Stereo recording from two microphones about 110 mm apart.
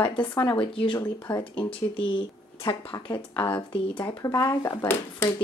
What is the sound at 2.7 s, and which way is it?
Speech, 50° left (ahead or behind).